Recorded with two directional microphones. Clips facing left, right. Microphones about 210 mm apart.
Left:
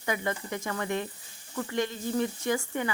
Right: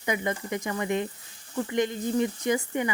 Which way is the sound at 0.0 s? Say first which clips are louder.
Right 2 dB; 15° right (ahead or behind).